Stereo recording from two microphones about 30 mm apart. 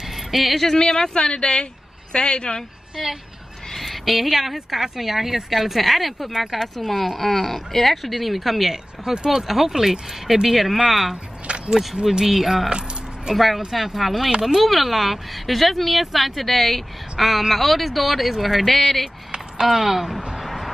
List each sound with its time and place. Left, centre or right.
0.3 s speech: centre
0.7 s speech: left
3.0 s speech: centre
6.9 s speech: centre
9.0 s speech: centre
9.5 s speech: centre
11.4 s a sound: right
11.9 s speech: centre
17.3 s speech: centre
19.6 s speech: centre
20.3 s a sound: centre